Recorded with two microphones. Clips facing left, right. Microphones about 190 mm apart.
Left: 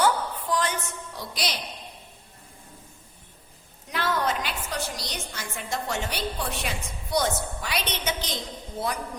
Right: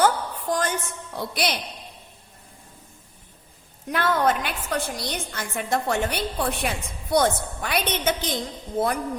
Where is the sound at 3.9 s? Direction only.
55° right (ahead or behind).